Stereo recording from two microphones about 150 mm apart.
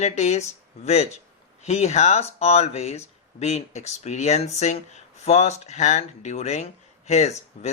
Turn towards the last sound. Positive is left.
turn(degrees=50)  # may be behind; listen again after turning